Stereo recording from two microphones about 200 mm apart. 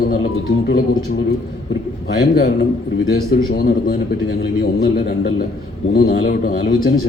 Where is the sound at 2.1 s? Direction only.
55° left (ahead or behind).